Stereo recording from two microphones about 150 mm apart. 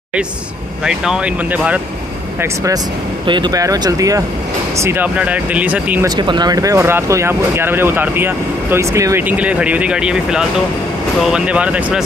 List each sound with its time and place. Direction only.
0.8 s speech: 5° right (ahead or behind)
2.4 s speech: 20° right (ahead or behind)
6.0 s speech: 30° right (ahead or behind); by 12.0 s 10° right (ahead or behind)